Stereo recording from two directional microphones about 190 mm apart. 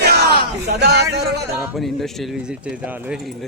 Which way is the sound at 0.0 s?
55° right (ahead or behind).